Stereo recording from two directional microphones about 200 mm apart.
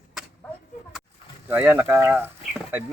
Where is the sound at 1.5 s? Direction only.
10° right (ahead or behind).